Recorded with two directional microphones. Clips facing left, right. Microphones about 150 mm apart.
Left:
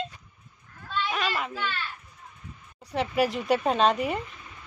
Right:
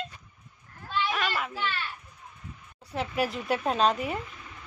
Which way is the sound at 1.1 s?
Centre (ahead or behind).